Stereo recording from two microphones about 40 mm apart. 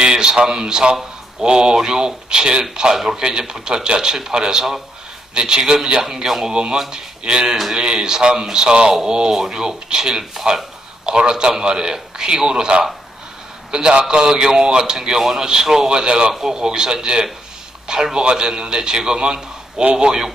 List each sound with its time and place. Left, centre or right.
0.0 s a man's voice: centre
6.5 s a man's voice: right
8.9 s a man's voice: centre
15.9 s a man's voice: centre
16.3 s a man's voice: centre